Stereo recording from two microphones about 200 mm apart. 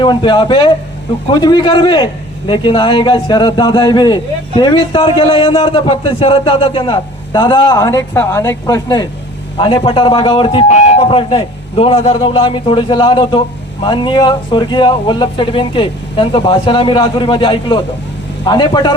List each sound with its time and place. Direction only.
0.0 s a man's voice: 25° left (ahead or behind)